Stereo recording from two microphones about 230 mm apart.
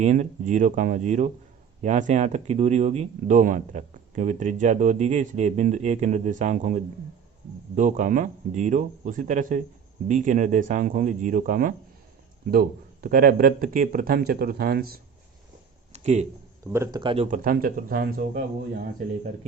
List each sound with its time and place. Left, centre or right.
0.0 s speech: right
15.9 s a sound: right
16.6 s speech: centre; by 18.4 s right